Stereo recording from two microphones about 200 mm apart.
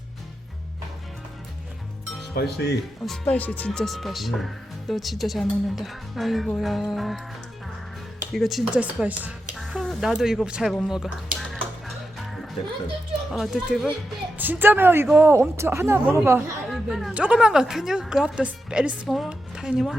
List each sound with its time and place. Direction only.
2.3 s speech: 55° left (ahead or behind)
3.1 s speech: 5° left (ahead or behind)
8.3 s speech: centre (ahead or behind)
12.2 s music: centre (ahead or behind)
13.3 s speech: 5° right (ahead or behind)
16.6 s speech: centre (ahead or behind)